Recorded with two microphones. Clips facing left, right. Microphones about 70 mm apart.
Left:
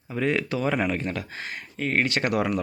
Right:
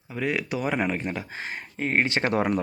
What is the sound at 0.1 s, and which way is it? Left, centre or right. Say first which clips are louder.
Speech: left 2 dB; centre.